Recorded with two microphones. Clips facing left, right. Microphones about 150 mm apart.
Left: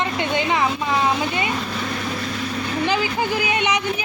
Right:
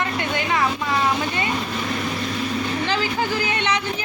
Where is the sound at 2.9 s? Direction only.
15° left (ahead or behind).